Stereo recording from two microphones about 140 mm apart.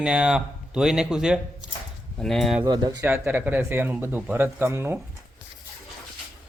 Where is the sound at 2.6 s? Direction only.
30° right (ahead or behind).